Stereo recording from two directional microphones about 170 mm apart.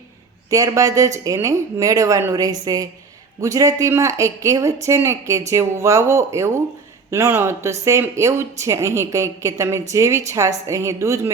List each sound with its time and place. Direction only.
0.5 s speech: 20° right (ahead or behind)